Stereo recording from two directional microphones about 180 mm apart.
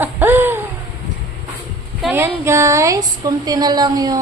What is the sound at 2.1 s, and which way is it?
Speech, 15° right (ahead or behind).